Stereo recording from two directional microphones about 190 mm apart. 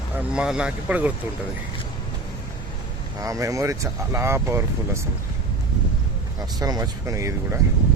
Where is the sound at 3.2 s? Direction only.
15° right (ahead or behind).